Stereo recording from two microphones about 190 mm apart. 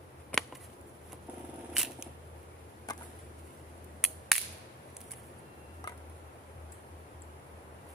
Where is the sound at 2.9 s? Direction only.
20° left (ahead or behind).